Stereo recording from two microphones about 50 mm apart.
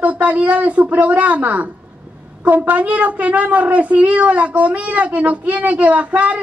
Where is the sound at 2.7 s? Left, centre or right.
Right.